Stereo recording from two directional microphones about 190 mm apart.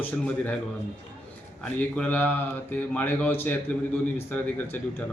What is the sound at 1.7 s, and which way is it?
A man's voice, 5° left (ahead or behind).